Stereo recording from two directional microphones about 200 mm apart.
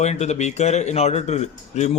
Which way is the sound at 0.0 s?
35° left (ahead or behind).